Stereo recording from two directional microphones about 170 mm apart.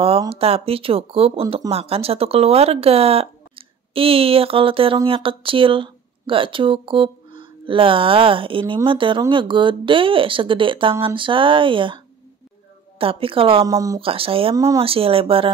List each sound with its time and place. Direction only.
0.3 s speech: 35° right (ahead or behind)
13.0 s speech: 35° right (ahead or behind)
13.7 s speech: 20° right (ahead or behind)
14.0 s speech: 35° right (ahead or behind)
14.5 s speech: 20° right (ahead or behind)
14.8 s speech: 35° right (ahead or behind)